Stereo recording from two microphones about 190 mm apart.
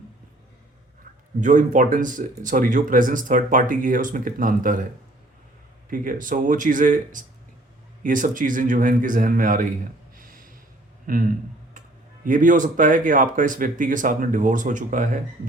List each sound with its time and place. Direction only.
1.4 s speech: 40° right (ahead or behind)
5.9 s speech: 45° right (ahead or behind)
10.2 s a sound: 45° right (ahead or behind)
11.0 s a man's voice: 45° right (ahead or behind)